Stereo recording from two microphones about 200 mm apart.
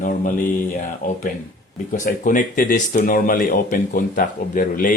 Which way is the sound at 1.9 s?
40° left (ahead or behind).